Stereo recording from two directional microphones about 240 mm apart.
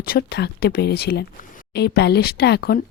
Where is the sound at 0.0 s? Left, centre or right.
Left.